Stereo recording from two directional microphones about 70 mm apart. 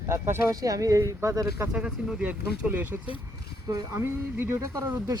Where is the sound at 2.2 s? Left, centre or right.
Right.